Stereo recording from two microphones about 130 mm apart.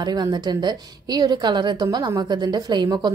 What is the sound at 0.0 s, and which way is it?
A woman's voice, 30° right (ahead or behind).